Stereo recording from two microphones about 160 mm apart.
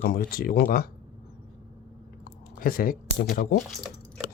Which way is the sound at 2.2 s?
65° left (ahead or behind).